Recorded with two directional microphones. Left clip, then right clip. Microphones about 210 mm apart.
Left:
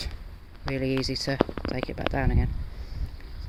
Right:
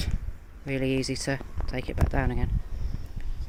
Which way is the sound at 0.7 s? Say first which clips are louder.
Even; 5° right (ahead or behind).